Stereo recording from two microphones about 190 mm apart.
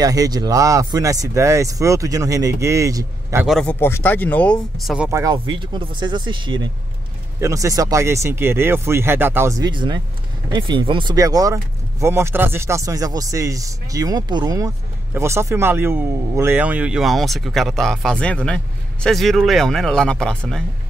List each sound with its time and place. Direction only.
0.0 s speech: 20° right (ahead or behind)
3.4 s speech: centre (ahead or behind)
5.2 s speech: 25° right (ahead or behind); by 20.6 s 5° left (ahead or behind)